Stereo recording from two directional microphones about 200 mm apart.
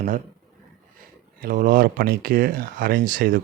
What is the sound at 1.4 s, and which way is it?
Speech, 40° right (ahead or behind).